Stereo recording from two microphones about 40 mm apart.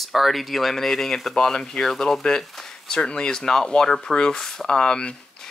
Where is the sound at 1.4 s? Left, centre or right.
Centre.